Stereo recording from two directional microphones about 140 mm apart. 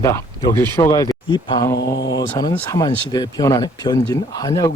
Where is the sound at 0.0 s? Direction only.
20° left (ahead or behind).